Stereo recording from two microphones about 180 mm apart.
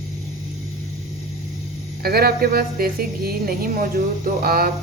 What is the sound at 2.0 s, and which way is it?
Speech, 60° right (ahead or behind).